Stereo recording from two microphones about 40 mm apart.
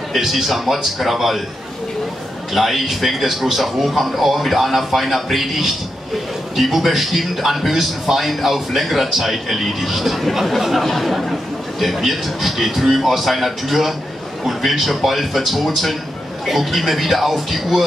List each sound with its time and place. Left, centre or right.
0.1 s a man's voice: centre
2.5 s a man's voice: centre